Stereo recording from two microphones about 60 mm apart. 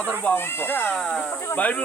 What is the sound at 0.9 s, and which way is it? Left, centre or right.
Speech, centre.